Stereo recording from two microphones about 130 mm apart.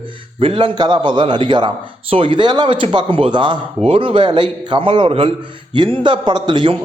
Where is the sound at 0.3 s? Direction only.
45° right (ahead or behind).